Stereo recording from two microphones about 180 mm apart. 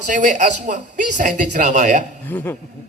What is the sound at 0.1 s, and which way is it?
A man's voice, 45° right (ahead or behind).